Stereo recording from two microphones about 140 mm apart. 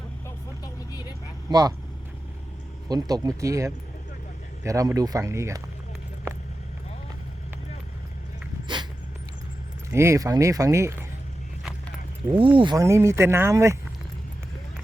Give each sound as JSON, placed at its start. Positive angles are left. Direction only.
{"t": 0.6, "sound": "vehicle", "side_deg": 30}
{"t": 1.5, "sound": "speech", "side_deg": -30}
{"t": 2.9, "sound": "speech", "side_deg": -25}
{"t": 8.6, "sound": "dog", "side_deg": -35}
{"t": 9.9, "sound": "speech", "side_deg": -20}
{"t": 12.3, "sound": "speech", "side_deg": -35}
{"t": 12.7, "sound": "speech", "side_deg": -20}